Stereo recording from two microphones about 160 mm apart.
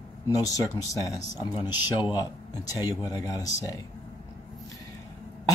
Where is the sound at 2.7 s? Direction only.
25° left (ahead or behind).